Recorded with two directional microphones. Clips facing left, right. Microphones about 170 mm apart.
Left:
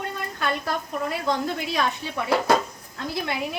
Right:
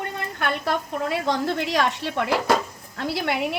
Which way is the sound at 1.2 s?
80° right.